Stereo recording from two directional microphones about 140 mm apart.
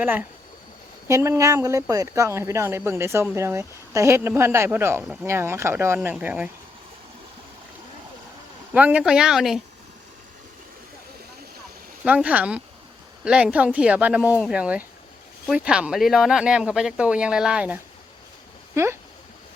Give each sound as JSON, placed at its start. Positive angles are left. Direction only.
{"t": 0.0, "sound": "speech", "side_deg": -15}
{"t": 8.7, "sound": "speech", "side_deg": -10}
{"t": 12.0, "sound": "speech", "side_deg": -10}
{"t": 18.7, "sound": "speech", "side_deg": -20}